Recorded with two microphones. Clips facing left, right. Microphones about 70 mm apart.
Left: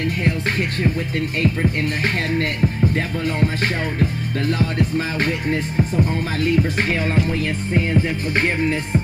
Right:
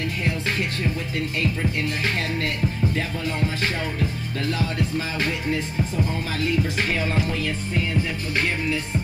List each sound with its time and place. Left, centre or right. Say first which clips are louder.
1.4 s music: left 6 dB; left
4.0 s music: left 5 dB; left